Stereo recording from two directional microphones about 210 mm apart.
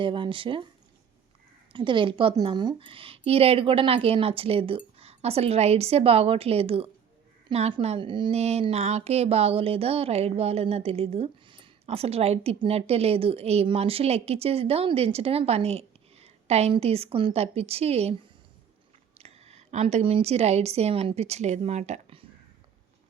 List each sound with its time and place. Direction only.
0.0 s a woman's voice: 25° right (ahead or behind)
1.7 s a woman's voice: 25° right (ahead or behind)
19.1 s a woman's voice: 30° right (ahead or behind)